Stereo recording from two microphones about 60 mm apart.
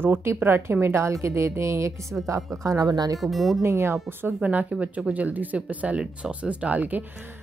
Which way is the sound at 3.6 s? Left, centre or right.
Right.